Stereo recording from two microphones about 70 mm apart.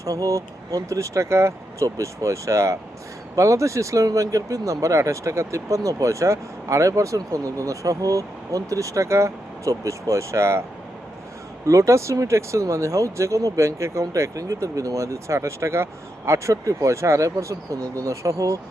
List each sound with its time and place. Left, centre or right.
0.0 s speech: right
11.6 s speech: right